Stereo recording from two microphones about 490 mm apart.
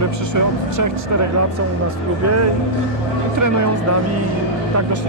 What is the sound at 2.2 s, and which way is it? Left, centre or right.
Speech, right.